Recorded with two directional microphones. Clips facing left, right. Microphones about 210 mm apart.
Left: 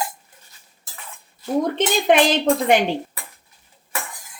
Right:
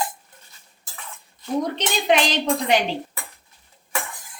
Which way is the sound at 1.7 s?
50° left (ahead or behind).